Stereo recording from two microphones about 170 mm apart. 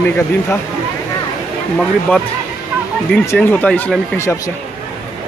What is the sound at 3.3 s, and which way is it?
A man's voice, 10° left (ahead or behind).